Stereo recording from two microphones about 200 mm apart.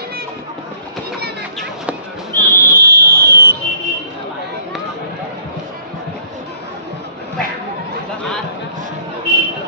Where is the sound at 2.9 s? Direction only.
50° right (ahead or behind).